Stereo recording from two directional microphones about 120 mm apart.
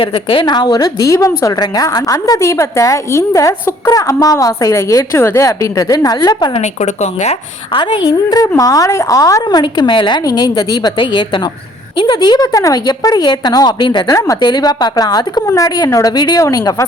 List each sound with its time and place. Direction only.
0.0 s a woman's voice: 45° left (ahead or behind)
6.5 s speech: 75° left (ahead or behind)
7.7 s a woman's voice: 40° left (ahead or behind)